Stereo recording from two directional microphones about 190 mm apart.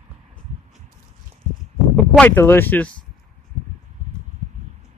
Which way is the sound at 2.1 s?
10° left (ahead or behind).